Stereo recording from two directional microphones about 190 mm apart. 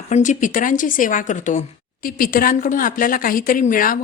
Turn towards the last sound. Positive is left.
turn(degrees=45)  # may be behind; listen again after turning